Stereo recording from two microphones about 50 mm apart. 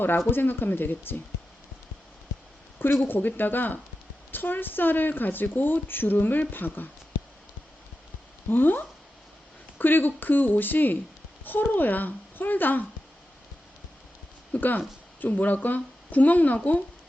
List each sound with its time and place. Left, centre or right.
0.3 s speech: left
3.1 s speech: left
8.4 s speech: left
14.5 s speech: left